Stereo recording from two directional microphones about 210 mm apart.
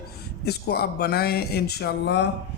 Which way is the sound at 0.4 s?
50° left (ahead or behind).